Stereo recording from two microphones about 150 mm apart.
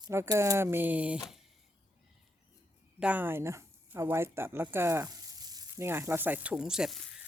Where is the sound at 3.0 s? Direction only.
10° right (ahead or behind).